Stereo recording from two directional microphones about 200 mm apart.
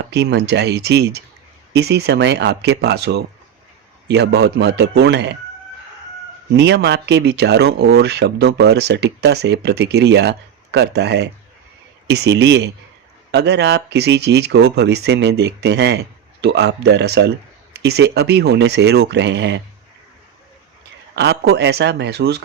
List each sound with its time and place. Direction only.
0.0 s speech: 55° right (ahead or behind)
6.6 s speech: 55° right (ahead or behind)
21.2 s speech: 55° right (ahead or behind)